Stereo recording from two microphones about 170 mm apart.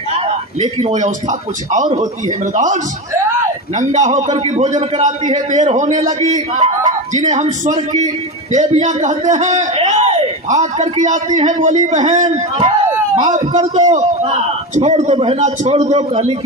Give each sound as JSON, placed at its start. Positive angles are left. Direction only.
{"t": 0.6, "sound": "a man's voice", "side_deg": -45}
{"t": 2.2, "sound": "a man's voice", "side_deg": -45}
{"t": 12.8, "sound": "a sound", "side_deg": -15}
{"t": 14.8, "sound": "a man's voice", "side_deg": -40}